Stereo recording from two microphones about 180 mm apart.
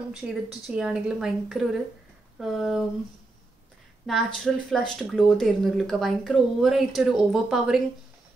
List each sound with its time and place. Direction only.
0.1 s speech: 5° right (ahead or behind)
4.0 s speech: centre (ahead or behind)